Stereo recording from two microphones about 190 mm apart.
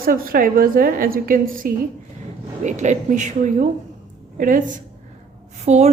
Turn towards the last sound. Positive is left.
turn(degrees=-35)  # may be behind; listen again after turning